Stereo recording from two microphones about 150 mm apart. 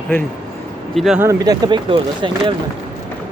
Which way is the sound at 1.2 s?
20° right (ahead or behind).